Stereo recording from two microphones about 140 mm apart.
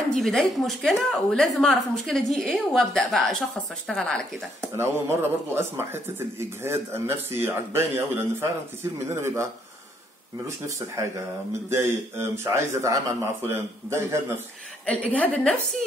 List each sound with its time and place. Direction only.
0.1 s a woman's voice: 5° left (ahead or behind)
4.7 s a man's voice: 20° right (ahead or behind)
11.7 s a man's voice: 15° right (ahead or behind)
14.9 s a woman's voice: 10° left (ahead or behind)